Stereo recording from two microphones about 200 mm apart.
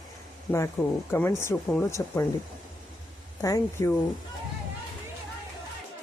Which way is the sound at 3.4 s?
15° left (ahead or behind).